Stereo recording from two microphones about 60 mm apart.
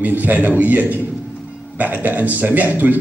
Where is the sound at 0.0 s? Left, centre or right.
Right.